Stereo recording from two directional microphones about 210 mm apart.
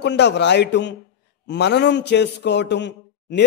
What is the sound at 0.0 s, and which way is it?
A man's voice, 55° left (ahead or behind).